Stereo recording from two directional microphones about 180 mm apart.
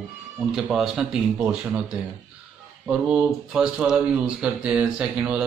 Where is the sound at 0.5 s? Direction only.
Centre (ahead or behind).